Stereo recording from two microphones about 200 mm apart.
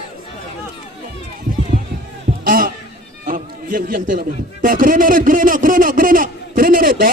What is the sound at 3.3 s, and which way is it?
A man's voice, 45° right (ahead or behind).